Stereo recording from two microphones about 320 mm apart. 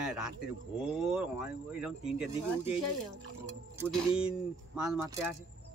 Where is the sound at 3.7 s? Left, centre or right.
Centre.